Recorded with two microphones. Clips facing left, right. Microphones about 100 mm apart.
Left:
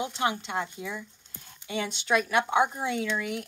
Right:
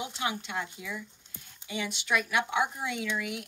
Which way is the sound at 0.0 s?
30° left (ahead or behind).